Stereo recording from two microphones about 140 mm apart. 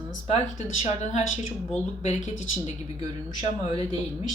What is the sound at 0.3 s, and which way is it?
Speech, 50° left (ahead or behind).